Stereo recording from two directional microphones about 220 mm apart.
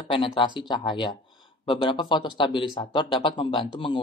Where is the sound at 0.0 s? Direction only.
25° left (ahead or behind).